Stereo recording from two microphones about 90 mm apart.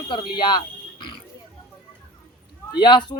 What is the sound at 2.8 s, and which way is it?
Speech, 60° left (ahead or behind).